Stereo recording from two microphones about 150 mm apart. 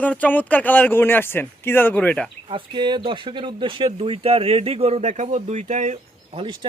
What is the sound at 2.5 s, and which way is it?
Speech, 30° right (ahead or behind).